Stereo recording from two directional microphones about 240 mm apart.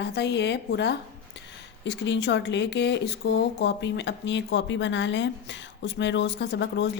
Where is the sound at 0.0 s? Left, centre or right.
Left.